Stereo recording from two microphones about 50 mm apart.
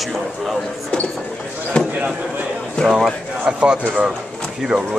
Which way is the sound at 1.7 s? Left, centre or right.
Left.